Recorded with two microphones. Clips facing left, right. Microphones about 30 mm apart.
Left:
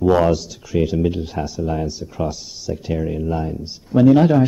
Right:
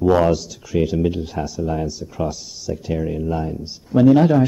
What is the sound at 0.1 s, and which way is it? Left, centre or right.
Speech, centre.